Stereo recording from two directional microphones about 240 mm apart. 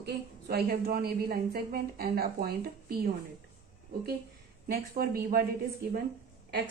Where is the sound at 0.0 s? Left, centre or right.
Right.